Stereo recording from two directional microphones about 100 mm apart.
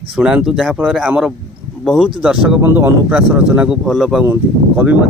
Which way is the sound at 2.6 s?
20° right (ahead or behind).